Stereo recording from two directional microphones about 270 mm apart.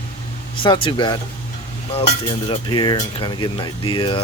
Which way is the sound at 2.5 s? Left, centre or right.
Centre.